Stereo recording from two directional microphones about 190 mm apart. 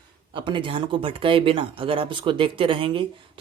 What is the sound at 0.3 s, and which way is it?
Speech, 25° right (ahead or behind).